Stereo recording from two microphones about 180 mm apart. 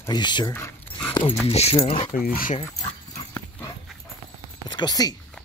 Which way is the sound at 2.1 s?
50° left (ahead or behind).